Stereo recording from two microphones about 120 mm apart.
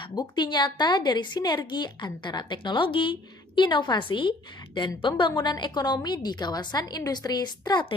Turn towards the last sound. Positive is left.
turn(degrees=40)  # may be behind; listen again after turning